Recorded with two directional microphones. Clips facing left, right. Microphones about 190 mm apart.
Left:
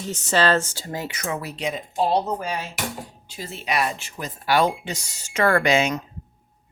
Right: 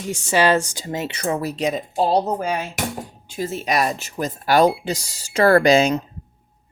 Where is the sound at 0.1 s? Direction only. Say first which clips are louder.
Right 3 dB; 10° right (ahead or behind); by 6.1 s 35° right (ahead or behind).